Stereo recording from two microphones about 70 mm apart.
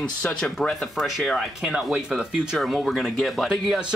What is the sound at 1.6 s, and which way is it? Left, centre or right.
Speech, centre.